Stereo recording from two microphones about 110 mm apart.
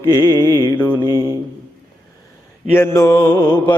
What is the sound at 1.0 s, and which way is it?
Mantra, 35° right (ahead or behind).